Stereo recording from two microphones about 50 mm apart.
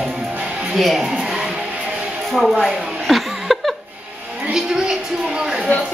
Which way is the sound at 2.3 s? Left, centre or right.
Centre.